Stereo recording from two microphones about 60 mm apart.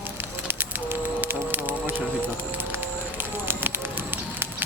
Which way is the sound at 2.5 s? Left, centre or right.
Right.